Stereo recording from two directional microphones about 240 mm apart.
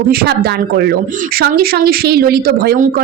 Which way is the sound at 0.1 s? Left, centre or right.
Right.